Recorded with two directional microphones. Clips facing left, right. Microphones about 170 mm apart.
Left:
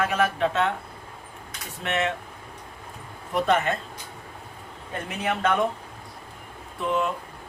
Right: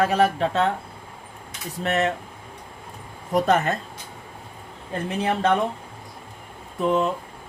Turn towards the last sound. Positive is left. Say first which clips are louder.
# right 4 dB
turn(degrees=-40)  # may be behind; listen again after turning